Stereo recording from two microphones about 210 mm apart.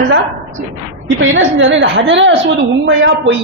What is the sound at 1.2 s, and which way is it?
A man's voice, 65° right (ahead or behind).